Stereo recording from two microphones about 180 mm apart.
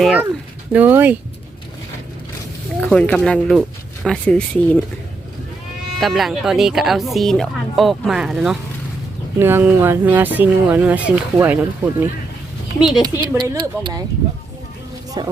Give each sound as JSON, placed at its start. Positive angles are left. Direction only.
{"t": 0.0, "sound": "speech", "side_deg": -5}
{"t": 2.8, "sound": "speech", "side_deg": 5}
{"t": 6.0, "sound": "speech", "side_deg": 0}
{"t": 13.0, "sound": "speech", "side_deg": -25}
{"t": 15.2, "sound": "speech", "side_deg": -25}